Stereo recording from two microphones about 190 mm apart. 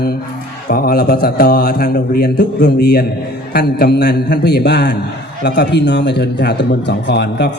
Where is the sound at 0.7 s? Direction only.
50° left (ahead or behind).